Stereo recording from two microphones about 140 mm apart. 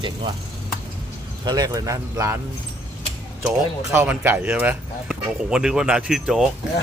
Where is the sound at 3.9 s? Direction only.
15° right (ahead or behind).